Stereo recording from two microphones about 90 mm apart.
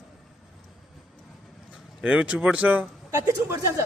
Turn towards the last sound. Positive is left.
turn(degrees=-35)  # may be behind; listen again after turning